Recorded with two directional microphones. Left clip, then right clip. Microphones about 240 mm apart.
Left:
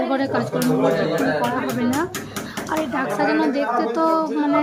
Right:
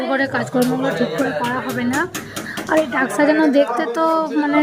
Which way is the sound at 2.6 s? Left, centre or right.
Centre.